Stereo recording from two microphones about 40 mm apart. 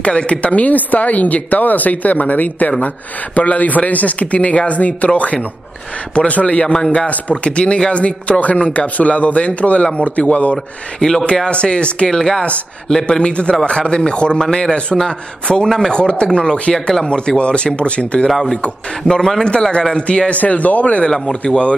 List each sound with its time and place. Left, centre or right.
0.0 s speech: left
6.7 s speech: left
7.1 s speech: left
11.0 s speech: centre
12.1 s speech: centre
13.0 s speech: left
18.3 s speech: centre
19.4 s speech: left
21.1 s speech: centre